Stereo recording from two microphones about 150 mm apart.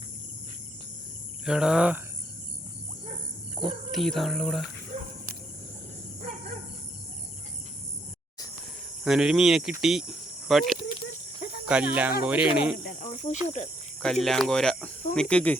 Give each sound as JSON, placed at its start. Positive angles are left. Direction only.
{"t": 1.5, "sound": "speech", "side_deg": -5}
{"t": 3.6, "sound": "speech", "side_deg": 5}
{"t": 4.9, "sound": "cricket", "side_deg": -50}
{"t": 9.0, "sound": "speech", "side_deg": -5}
{"t": 12.8, "sound": "speech", "side_deg": 65}
{"t": 13.1, "sound": "speech", "side_deg": 50}
{"t": 14.0, "sound": "speech", "side_deg": 5}